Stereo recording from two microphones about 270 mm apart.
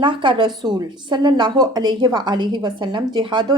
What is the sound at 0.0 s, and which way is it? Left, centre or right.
A woman's voice, centre.